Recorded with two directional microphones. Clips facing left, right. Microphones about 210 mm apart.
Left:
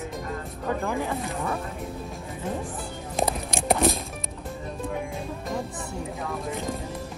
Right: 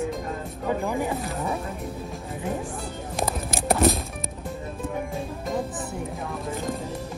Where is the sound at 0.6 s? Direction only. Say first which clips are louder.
Right 2 dB; 10° right (ahead or behind).